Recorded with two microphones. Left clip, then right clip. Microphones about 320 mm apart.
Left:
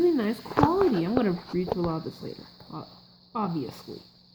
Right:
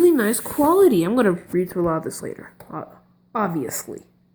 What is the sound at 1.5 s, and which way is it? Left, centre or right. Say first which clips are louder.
Speech: right 7 dB; centre.